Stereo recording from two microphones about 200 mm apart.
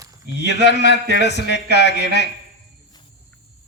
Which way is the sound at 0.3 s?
60° left (ahead or behind).